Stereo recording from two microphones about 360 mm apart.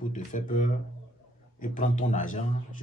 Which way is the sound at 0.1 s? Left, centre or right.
Left.